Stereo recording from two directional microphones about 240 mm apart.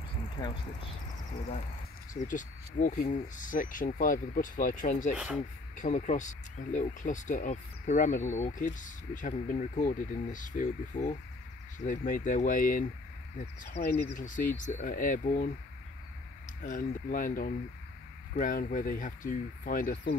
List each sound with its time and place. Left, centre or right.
0.4 s speech: centre
2.2 s speech: left
5.1 s speech: centre
5.8 s speech: left
16.6 s speech: left